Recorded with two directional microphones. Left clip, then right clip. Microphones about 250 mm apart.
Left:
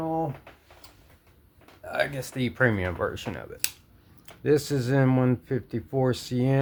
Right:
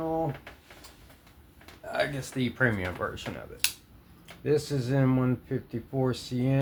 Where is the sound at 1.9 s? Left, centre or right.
Left.